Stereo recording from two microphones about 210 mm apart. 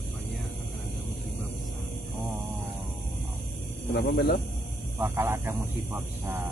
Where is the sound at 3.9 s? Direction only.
50° left (ahead or behind).